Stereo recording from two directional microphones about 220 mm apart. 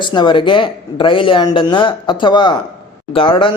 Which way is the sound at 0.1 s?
20° left (ahead or behind).